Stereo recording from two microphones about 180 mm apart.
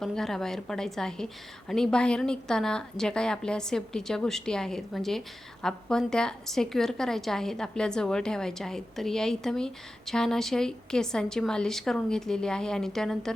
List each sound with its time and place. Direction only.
0.0 s a woman's voice: centre (ahead or behind)